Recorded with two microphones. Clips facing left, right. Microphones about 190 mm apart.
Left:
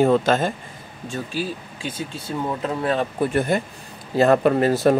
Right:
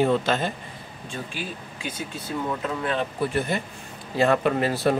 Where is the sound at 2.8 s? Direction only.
45° left (ahead or behind).